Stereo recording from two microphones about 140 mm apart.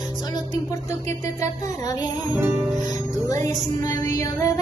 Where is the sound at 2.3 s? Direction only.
15° right (ahead or behind).